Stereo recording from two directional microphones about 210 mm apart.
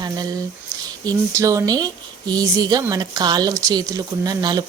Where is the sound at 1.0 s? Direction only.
15° right (ahead or behind).